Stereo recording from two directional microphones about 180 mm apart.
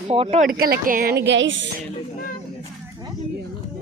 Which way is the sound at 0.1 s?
35° right (ahead or behind).